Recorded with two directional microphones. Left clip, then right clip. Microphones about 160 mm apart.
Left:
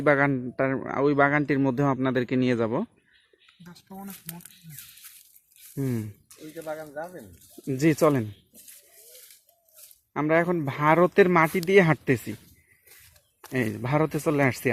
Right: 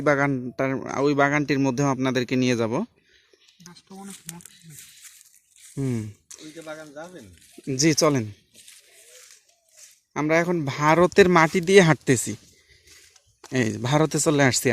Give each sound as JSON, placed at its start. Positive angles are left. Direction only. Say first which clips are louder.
{"t": 0.0, "sound": "speech", "louder": "even", "side_deg": -15}
{"t": 3.8, "sound": "speech", "louder": "left 1 dB", "side_deg": 45}
{"t": 5.7, "sound": "speech", "louder": "right 2 dB", "side_deg": -20}
{"t": 6.7, "sound": "speech", "louder": "left 4 dB", "side_deg": 30}
{"t": 7.6, "sound": "speech", "louder": "right 1 dB", "side_deg": -15}
{"t": 10.1, "sound": "speech", "louder": "right 1 dB", "side_deg": -15}
{"t": 13.5, "sound": "speech", "louder": "right 3 dB", "side_deg": -30}